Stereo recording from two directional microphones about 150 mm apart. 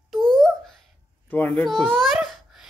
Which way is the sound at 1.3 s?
15° left (ahead or behind).